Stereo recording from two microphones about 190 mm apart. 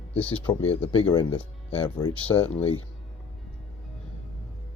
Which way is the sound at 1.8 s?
10° left (ahead or behind).